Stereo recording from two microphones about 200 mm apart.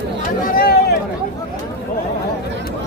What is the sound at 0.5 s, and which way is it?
Speech, 50° left (ahead or behind).